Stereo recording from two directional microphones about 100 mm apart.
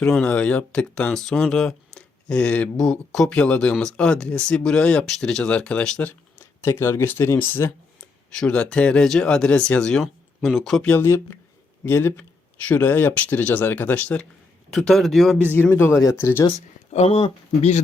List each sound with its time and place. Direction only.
0.0 s speech: 5° left (ahead or behind)
8.4 s speech: 10° left (ahead or behind)
10.0 s speech: centre (ahead or behind)
10.8 s speech: 25° left (ahead or behind)
14.7 s speech: 5° left (ahead or behind)
15.5 s speech: 20° left (ahead or behind)
16.0 s speech: 30° left (ahead or behind)
16.9 s speech: 75° left (ahead or behind); by 17.7 s 60° left (ahead or behind)